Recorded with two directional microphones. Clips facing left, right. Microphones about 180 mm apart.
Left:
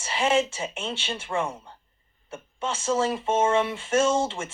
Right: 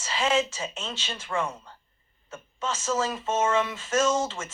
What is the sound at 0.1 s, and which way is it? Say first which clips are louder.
Speech: left 2 dB; 25° left (ahead or behind).